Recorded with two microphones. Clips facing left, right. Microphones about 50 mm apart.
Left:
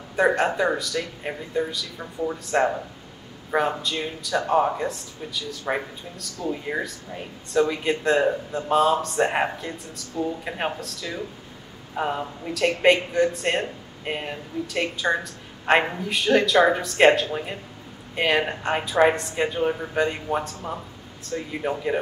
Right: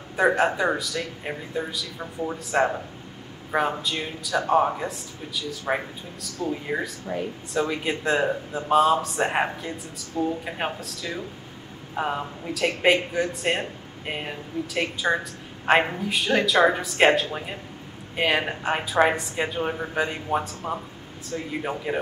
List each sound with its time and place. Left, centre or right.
0.1 s speech: centre
6.4 s speech: centre
7.5 s speech: centre